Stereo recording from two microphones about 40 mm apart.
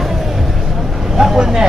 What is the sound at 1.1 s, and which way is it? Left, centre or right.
Speech, centre.